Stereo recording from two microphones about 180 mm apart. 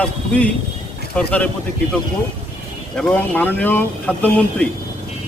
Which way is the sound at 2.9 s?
5° left (ahead or behind).